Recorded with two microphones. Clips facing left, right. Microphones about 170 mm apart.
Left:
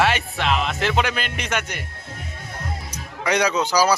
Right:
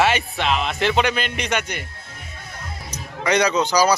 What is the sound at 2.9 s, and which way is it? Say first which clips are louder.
Speech: right 2 dB; 10° left (ahead or behind).